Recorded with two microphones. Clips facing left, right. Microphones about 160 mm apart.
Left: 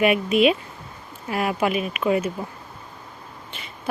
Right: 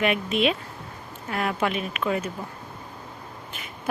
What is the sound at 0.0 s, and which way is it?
Speech, 10° left (ahead or behind).